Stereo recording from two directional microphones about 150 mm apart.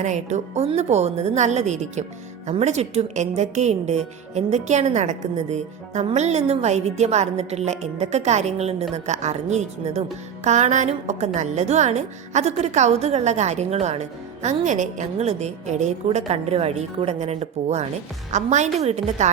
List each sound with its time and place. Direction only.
0.0 s a woman's voice: 50° right (ahead or behind)